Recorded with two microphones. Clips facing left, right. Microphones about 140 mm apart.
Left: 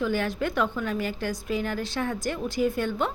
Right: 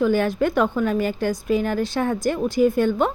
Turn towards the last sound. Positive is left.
turn(degrees=-45)  # may be behind; listen again after turning